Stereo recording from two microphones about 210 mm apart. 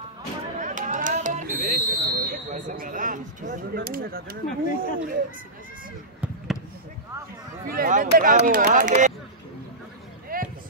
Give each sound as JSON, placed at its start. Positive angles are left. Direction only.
{"t": 0.6, "sound": "a sound", "side_deg": -35}
{"t": 1.5, "sound": "speech", "side_deg": -10}
{"t": 2.2, "sound": "speech", "side_deg": -40}
{"t": 6.2, "sound": "basketball bounce", "side_deg": 0}
{"t": 7.6, "sound": "speech", "side_deg": -45}
{"t": 10.3, "sound": "a sound", "side_deg": -40}